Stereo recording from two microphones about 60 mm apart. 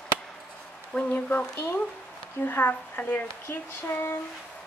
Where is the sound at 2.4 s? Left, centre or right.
Left.